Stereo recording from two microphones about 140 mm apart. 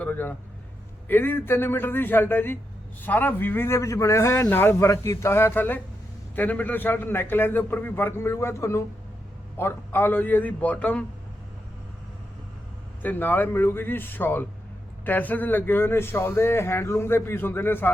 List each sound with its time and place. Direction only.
0.0 s vehicle: 15° left (ahead or behind)
1.0 s speech: 15° left (ahead or behind)
13.0 s speech: 15° left (ahead or behind)